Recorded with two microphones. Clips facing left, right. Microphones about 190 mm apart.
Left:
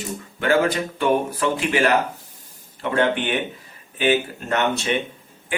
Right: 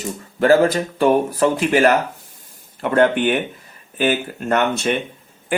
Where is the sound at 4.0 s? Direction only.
45° right (ahead or behind).